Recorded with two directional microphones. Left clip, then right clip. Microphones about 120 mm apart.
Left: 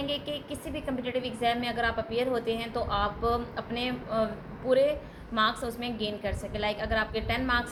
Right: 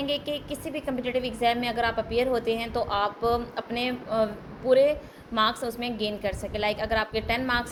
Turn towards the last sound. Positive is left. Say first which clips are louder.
# right 2 dB
turn(degrees=-45)  # may be behind; listen again after turning